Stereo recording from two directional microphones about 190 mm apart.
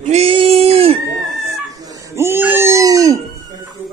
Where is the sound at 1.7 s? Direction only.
20° right (ahead or behind).